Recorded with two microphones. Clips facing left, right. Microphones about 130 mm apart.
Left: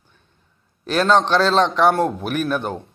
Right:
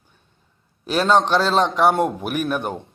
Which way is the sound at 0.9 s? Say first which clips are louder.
Left 1 dB; 10° right (ahead or behind).